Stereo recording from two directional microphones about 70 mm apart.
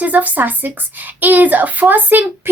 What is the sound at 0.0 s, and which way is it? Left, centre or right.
Speech, right.